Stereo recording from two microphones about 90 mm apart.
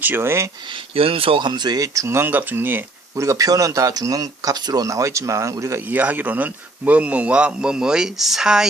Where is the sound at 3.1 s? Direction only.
35° right (ahead or behind).